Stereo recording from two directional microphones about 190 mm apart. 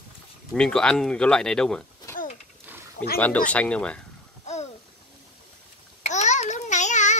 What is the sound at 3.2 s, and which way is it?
Speech, 10° left (ahead or behind).